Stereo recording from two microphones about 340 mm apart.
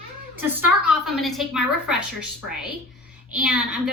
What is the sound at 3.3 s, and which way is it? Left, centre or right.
Speech, centre.